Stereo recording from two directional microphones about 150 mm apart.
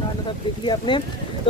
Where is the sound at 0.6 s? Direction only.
30° left (ahead or behind).